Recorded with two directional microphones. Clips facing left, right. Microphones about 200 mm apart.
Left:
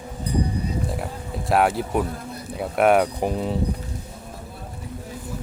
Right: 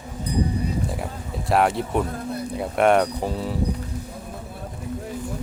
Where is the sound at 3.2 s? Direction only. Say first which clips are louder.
Left 2 dB; 20° left (ahead or behind).